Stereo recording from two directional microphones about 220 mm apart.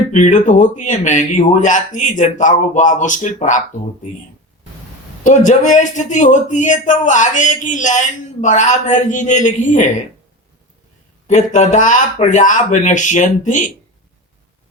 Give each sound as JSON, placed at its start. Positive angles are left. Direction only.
{"t": 0.1, "sound": "a man's voice", "side_deg": 35}
{"t": 5.2, "sound": "a man's voice", "side_deg": 35}
{"t": 11.3, "sound": "a man's voice", "side_deg": 35}